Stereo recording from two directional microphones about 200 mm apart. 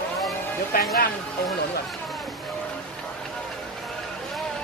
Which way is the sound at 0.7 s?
50° left (ahead or behind).